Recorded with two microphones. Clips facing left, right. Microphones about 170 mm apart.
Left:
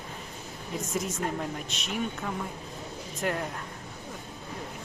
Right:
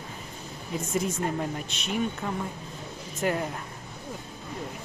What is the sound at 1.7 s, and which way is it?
Speech, centre (ahead or behind).